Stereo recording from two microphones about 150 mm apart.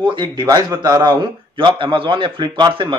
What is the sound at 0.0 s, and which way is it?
A man's voice, 30° right (ahead or behind).